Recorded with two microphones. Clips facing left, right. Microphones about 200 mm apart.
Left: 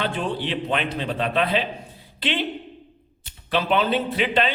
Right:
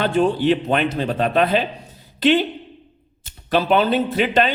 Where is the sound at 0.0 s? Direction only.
45° right (ahead or behind).